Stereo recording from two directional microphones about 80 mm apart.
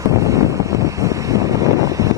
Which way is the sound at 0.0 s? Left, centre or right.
Right.